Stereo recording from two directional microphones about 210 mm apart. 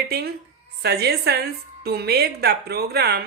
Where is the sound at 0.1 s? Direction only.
50° right (ahead or behind).